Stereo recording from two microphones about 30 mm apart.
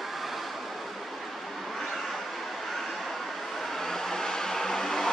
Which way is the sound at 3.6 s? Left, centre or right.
Centre.